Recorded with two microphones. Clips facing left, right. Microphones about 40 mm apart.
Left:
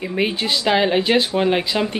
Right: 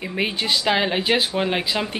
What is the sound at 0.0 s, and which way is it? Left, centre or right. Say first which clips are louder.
Speech: left 3 dB; centre.